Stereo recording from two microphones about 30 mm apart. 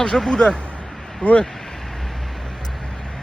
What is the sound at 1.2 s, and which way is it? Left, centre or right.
Speech, left.